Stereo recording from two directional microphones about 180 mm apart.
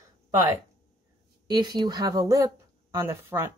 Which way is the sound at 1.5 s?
25° right (ahead or behind).